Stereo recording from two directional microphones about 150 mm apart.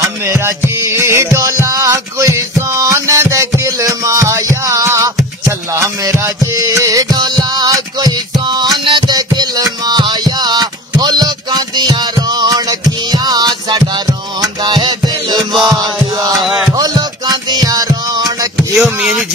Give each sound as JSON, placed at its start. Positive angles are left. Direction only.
{"t": 0.0, "sound": "music", "side_deg": -20}
{"t": 16.3, "sound": "music", "side_deg": 0}
{"t": 16.7, "sound": "music", "side_deg": -25}
{"t": 18.8, "sound": "speech", "side_deg": 0}